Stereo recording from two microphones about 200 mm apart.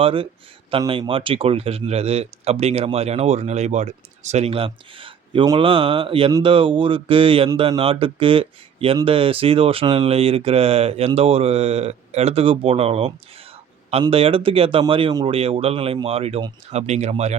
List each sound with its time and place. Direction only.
0.0 s a man's voice: 25° right (ahead or behind)